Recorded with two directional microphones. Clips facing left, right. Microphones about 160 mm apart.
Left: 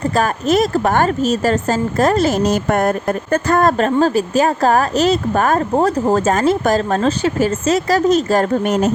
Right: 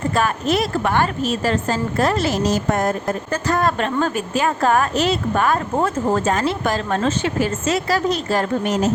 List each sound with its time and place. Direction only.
0.2 s speech: 45° left (ahead or behind)